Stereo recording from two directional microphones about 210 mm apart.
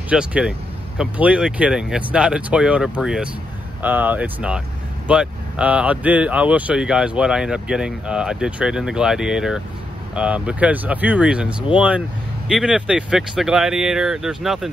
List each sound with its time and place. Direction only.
0.1 s speech: 5° right (ahead or behind)